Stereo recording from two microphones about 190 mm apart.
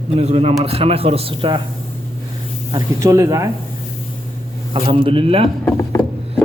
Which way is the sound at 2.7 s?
20° right (ahead or behind).